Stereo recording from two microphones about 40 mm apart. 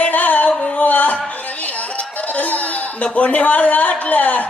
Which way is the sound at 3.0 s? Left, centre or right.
Left.